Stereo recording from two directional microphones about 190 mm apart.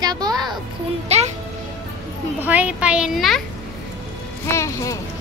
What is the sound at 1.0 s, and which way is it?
Speech, 35° right (ahead or behind).